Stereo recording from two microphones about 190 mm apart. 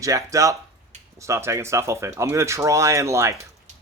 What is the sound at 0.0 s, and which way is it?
Speech, 15° right (ahead or behind).